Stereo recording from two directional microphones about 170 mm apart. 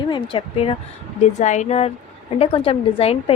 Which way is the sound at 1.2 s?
45° left (ahead or behind).